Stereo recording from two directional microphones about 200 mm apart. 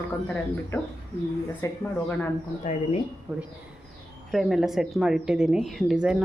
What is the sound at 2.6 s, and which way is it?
Speech, 40° left (ahead or behind).